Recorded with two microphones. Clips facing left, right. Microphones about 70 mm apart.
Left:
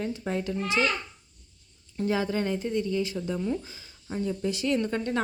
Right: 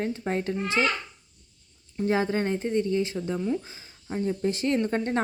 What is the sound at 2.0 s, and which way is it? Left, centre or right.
Speech, right.